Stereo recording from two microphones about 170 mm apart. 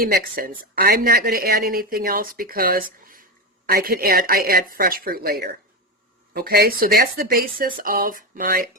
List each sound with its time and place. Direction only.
0.1 s a woman's voice: 55° right (ahead or behind)